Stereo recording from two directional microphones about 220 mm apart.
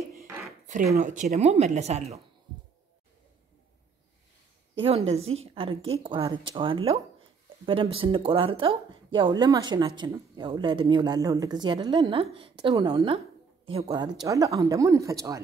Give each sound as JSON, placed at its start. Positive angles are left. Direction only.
{"t": 0.9, "sound": "speech", "side_deg": -35}
{"t": 4.8, "sound": "speech", "side_deg": -25}
{"t": 5.2, "sound": "a woman's voice", "side_deg": -65}
{"t": 5.5, "sound": "speech", "side_deg": -25}